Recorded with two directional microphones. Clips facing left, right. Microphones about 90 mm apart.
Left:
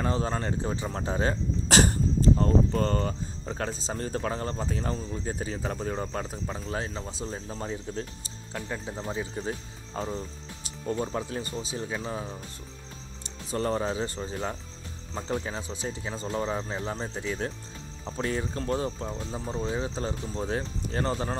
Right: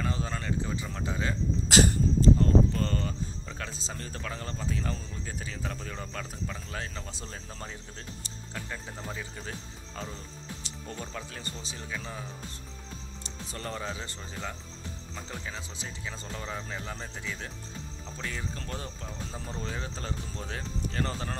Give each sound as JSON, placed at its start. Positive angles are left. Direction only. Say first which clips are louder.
{"t": 0.0, "sound": "speech", "louder": "left 5 dB", "side_deg": 35}
{"t": 13.5, "sound": "speech", "louder": "left 9 dB", "side_deg": 30}
{"t": 15.1, "sound": "speech", "louder": "left 10 dB", "side_deg": 35}
{"t": 19.4, "sound": "speech", "louder": "left 8 dB", "side_deg": 20}